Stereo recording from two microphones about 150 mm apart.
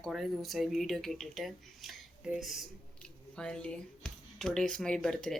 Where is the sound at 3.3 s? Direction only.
5° left (ahead or behind).